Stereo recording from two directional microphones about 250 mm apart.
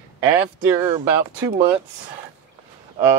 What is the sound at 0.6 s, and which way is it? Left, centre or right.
Speech, centre.